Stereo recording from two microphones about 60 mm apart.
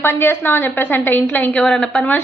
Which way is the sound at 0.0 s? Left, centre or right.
Left.